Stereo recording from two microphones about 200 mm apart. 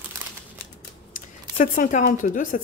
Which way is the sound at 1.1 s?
40° left (ahead or behind).